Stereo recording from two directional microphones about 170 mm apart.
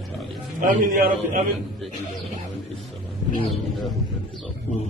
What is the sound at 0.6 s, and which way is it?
Speech, 50° right (ahead or behind).